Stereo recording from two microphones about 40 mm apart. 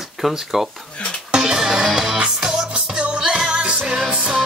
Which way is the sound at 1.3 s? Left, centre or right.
Centre.